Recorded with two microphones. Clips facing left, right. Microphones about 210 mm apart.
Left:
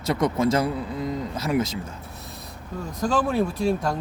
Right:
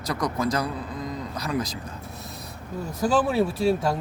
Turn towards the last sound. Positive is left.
turn(degrees=-5)  # may be behind; listen again after turning